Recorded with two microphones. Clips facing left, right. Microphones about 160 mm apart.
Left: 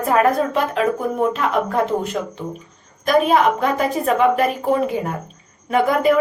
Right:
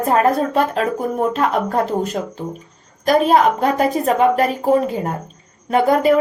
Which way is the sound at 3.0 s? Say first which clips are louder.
Right 2 dB; 35° right (ahead or behind).